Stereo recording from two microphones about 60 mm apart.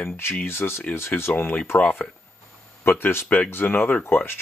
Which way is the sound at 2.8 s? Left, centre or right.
Left.